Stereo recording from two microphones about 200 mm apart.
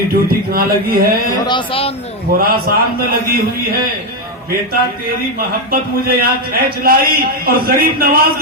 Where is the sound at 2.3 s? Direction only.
50° right (ahead or behind).